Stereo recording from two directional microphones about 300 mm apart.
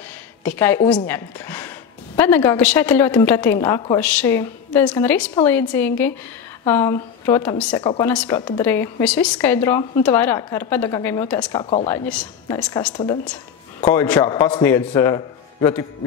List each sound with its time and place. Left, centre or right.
0.4 s a woman's voice: centre
7.8 s a woman's voice: centre
8.1 s a woman's voice: centre
11.5 s a woman's voice: centre
12.1 s a woman's voice: centre